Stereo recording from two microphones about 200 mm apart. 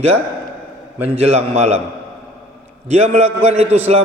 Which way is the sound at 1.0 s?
30° right (ahead or behind).